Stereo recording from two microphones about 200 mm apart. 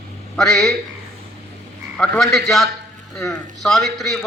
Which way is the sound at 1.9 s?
Centre (ahead or behind).